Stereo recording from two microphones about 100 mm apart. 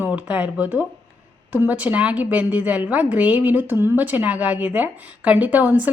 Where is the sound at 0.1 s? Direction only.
10° right (ahead or behind).